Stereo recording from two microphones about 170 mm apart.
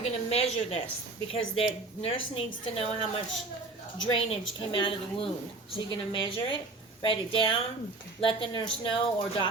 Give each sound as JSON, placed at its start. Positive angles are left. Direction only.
{"t": 0.0, "sound": "a woman's voice", "side_deg": 35}